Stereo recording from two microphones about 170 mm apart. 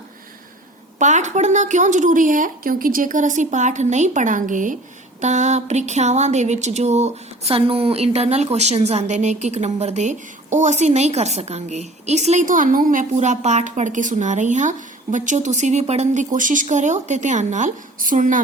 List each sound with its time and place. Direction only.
0.9 s speech: 45° right (ahead or behind)